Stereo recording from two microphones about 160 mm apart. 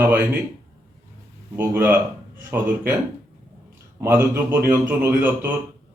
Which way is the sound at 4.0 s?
15° right (ahead or behind).